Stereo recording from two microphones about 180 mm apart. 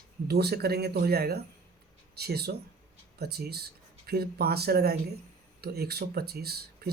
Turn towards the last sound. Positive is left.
turn(degrees=-60)  # may be behind; listen again after turning